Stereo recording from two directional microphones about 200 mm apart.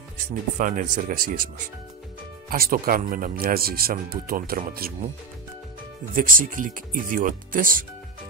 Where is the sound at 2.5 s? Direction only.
45° right (ahead or behind).